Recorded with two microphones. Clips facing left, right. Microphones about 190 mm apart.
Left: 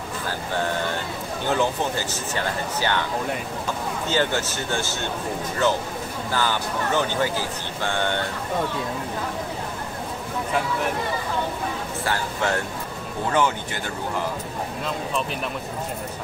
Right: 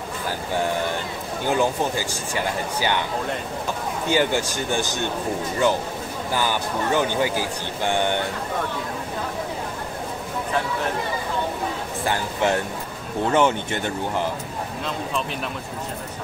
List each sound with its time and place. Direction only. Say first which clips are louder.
1.5 s speech: right 2 dB; 10° right (ahead or behind)
4.1 s speech: right 3 dB; 15° right (ahead or behind)
6.3 s speech: right 1 dB; 15° right (ahead or behind)
12.0 s speech: right 3 dB; 20° right (ahead or behind)